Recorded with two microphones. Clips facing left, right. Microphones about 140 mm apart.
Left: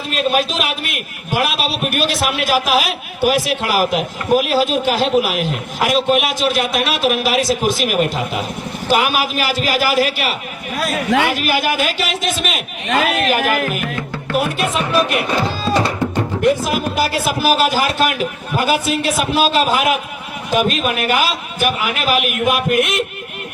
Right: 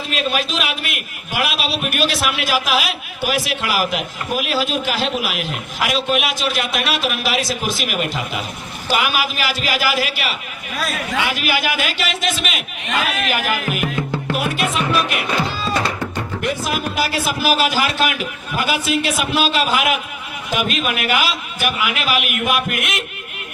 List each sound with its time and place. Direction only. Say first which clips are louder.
0.1 s a man's voice: left 5 dB; 45° left (ahead or behind)
10.8 s a man's voice: left 4 dB; 25° left (ahead or behind)
11.1 s a man's voice: left 5 dB; 50° left (ahead or behind)
15.4 s music: left 4 dB; 40° left (ahead or behind)
15.8 s music: left 5 dB; 15° left (ahead or behind)
16.7 s a man's voice: left 3 dB; 45° left (ahead or behind)